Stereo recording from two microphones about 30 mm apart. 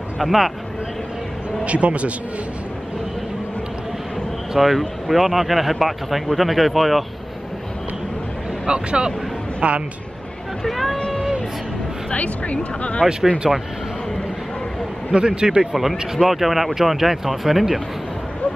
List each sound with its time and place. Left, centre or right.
0.2 s speech: centre
1.6 s a man's voice: right
4.6 s speech: centre
8.6 s speech: right
10.6 s speech: centre
12.2 s speech: left
13.4 s speech: centre
15.0 s speech: right
15.6 s speech: centre